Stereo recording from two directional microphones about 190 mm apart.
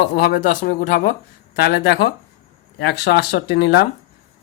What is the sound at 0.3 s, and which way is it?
Speech, 40° left (ahead or behind).